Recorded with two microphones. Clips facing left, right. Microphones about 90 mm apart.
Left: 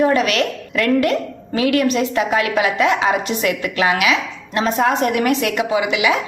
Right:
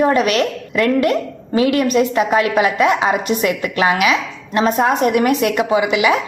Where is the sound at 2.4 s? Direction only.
30° right (ahead or behind).